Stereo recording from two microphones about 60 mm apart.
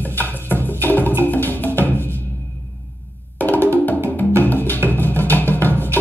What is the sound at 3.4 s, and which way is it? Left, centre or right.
Wood block, left.